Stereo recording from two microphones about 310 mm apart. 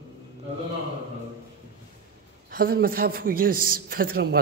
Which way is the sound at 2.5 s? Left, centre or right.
Right.